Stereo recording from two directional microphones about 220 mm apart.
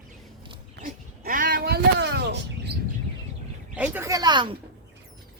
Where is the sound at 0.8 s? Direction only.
40° right (ahead or behind).